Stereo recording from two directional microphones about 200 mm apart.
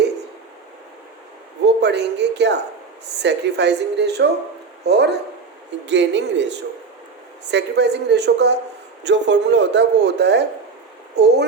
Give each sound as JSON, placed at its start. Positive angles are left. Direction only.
{"t": 1.6, "sound": "speech", "side_deg": -60}